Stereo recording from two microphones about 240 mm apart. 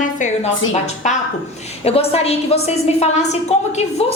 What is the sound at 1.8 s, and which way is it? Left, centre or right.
A woman's voice, left.